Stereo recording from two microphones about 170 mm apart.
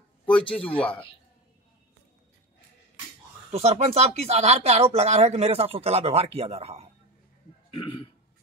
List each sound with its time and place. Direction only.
0.6 s speech: 10° left (ahead or behind)
3.5 s speech: 40° right (ahead or behind)
7.7 s speech: 30° left (ahead or behind)